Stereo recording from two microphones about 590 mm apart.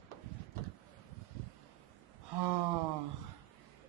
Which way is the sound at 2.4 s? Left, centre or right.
Right.